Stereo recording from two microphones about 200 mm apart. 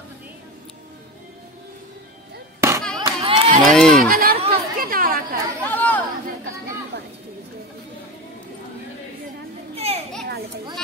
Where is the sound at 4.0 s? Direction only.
45° right (ahead or behind).